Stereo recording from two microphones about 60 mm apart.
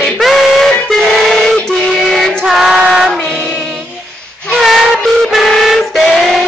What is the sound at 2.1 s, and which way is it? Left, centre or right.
Music, centre.